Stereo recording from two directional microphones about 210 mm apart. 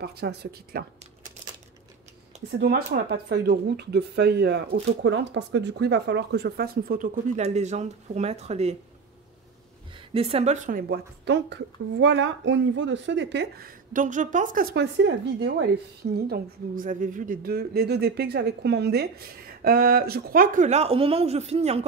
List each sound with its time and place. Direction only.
0.0 s a woman's voice: 50° right (ahead or behind)
2.6 s a woman's voice: 50° right (ahead or behind); by 8.7 s 30° right (ahead or behind)
10.1 s a woman's voice: 25° right (ahead or behind)